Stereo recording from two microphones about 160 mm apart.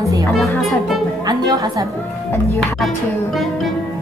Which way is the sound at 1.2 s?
25° right (ahead or behind).